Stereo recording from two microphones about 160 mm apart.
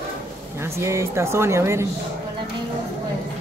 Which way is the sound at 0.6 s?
15° right (ahead or behind).